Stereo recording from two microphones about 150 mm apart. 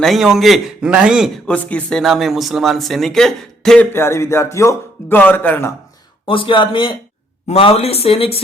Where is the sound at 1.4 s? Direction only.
10° left (ahead or behind).